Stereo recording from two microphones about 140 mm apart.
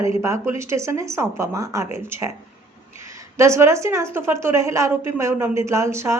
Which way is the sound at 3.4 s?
20° right (ahead or behind).